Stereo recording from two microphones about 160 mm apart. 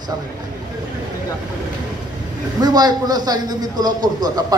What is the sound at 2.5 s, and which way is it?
A man's voice, 25° right (ahead or behind).